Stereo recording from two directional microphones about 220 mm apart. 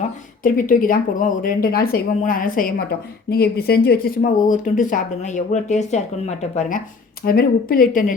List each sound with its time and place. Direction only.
0.4 s speech: 40° left (ahead or behind)